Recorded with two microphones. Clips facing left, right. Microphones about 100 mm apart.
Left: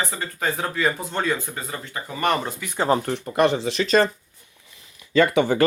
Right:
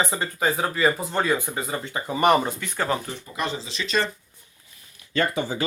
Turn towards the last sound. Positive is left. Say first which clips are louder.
# left 8 dB
turn(degrees=60)  # may be behind; listen again after turning